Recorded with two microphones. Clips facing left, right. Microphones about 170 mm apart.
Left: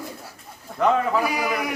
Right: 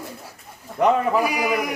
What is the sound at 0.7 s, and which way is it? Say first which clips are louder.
Speech: right 2 dB; 20° right (ahead or behind).